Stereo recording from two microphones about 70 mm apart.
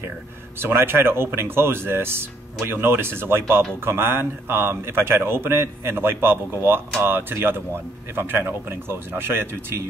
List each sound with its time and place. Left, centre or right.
0.6 s speech: right